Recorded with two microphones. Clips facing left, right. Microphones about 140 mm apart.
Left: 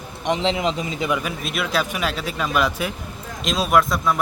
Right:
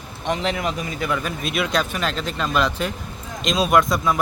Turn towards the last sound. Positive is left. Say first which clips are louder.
# even
turn(degrees=0)  # may be behind; listen again after turning